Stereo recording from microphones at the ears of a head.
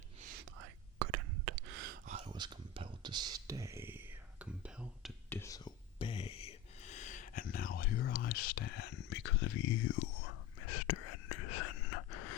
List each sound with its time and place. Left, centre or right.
0.2 s whispering: right
4.4 s whispering: centre
5.5 s whispering: left